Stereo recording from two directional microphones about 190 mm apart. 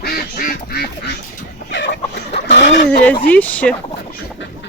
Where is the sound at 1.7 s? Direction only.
65° left (ahead or behind).